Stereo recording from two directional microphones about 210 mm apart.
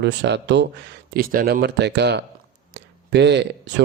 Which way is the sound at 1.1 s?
45° right (ahead or behind).